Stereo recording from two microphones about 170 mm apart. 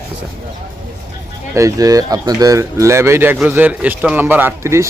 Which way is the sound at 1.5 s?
20° right (ahead or behind).